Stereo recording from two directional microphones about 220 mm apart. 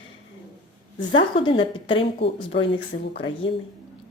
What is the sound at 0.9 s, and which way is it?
A woman's voice, 20° left (ahead or behind).